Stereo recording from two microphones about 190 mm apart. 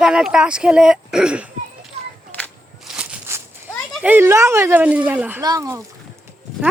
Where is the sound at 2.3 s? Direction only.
5° left (ahead or behind).